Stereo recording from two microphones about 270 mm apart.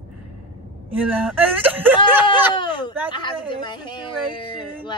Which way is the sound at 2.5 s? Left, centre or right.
Centre.